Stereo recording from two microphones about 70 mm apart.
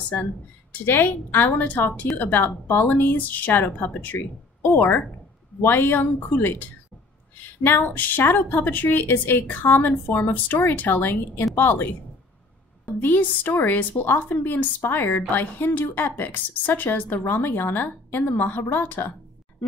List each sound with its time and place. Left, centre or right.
0.8 s a woman's voice: left
7.6 s a woman's voice: left
13.0 s a woman's voice: left